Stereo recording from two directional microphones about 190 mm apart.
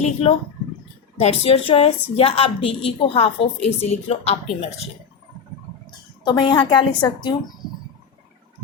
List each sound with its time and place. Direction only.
0.0 s a woman's voice: 30° left (ahead or behind)
5.8 s a sound: 25° left (ahead or behind)
7.2 s speech: 25° left (ahead or behind)